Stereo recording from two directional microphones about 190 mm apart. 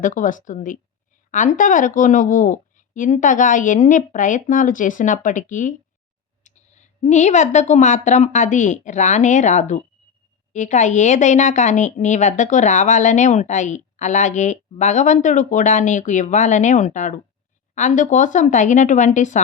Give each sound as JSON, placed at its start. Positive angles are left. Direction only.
{"t": 0.0, "sound": "speech", "side_deg": 45}